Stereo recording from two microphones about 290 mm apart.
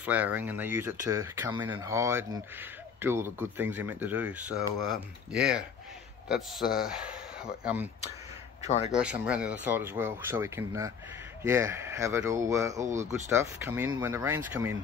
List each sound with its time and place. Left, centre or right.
0.0 s a man's voice: centre
8.6 s a man's voice: left
8.9 s speech: centre
12.8 s speech: right
13.3 s speech: centre